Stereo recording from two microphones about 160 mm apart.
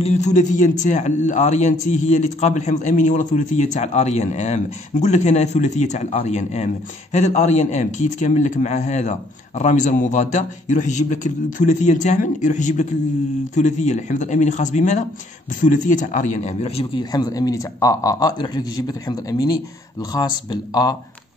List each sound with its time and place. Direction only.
0.0 s a man's voice: 45° left (ahead or behind)
17.0 s speech: 25° left (ahead or behind)